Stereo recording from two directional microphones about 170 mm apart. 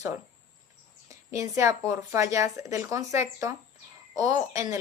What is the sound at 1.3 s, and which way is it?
A woman's voice, 20° right (ahead or behind).